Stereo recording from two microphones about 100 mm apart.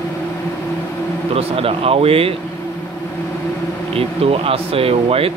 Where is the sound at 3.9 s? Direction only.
70° right (ahead or behind).